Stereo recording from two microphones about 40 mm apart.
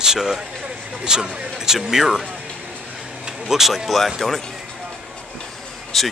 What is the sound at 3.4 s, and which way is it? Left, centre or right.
Speech, centre.